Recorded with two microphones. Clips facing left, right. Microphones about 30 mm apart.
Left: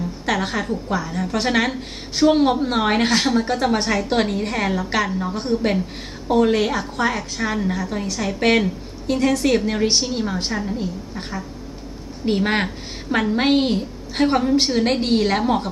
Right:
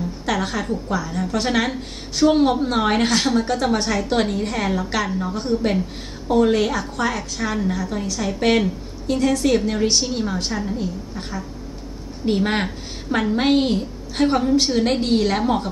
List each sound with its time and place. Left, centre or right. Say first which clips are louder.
0.3 s a woman's voice: left 1 dB; left
5.3 s a woman's voice: right 1 dB; left; by 15.7 s centre